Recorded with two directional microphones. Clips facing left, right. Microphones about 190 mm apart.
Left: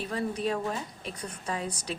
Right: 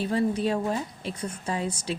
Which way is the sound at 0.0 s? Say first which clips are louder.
Right 6 dB; 30° right (ahead or behind).